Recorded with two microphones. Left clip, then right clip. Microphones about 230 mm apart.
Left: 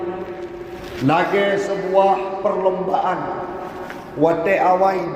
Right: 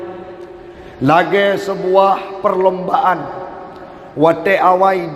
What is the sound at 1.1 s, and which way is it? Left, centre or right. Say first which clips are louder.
A man's voice: right 5 dB; right.